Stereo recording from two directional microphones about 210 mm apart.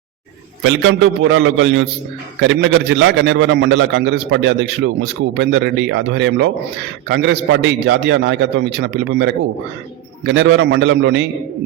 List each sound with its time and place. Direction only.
0.6 s a man's voice: 65° right (ahead or behind)